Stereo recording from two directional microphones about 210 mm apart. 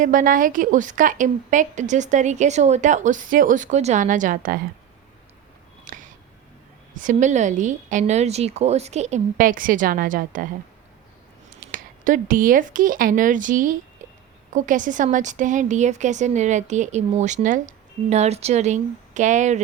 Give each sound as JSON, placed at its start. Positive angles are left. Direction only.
{"t": 0.0, "sound": "a woman's voice", "side_deg": -40}
{"t": 5.8, "sound": "a sound", "side_deg": -35}
{"t": 6.9, "sound": "a woman's voice", "side_deg": -40}
{"t": 11.7, "sound": "a woman's voice", "side_deg": -40}